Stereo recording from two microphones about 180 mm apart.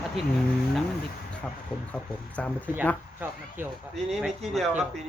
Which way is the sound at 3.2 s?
10° right (ahead or behind).